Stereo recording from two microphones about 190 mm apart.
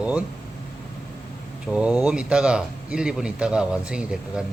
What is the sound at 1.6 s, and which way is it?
Speech, 5° right (ahead or behind).